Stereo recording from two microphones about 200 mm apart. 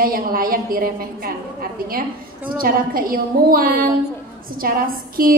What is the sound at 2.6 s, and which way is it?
A woman's voice, 45° right (ahead or behind).